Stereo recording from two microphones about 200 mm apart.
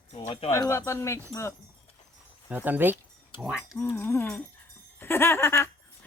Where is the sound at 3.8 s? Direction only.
10° left (ahead or behind).